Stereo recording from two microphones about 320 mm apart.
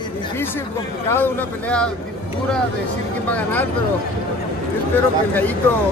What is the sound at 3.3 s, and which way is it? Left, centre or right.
Speech, centre.